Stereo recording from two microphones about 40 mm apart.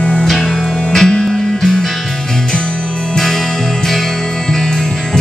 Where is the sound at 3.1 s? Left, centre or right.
Centre.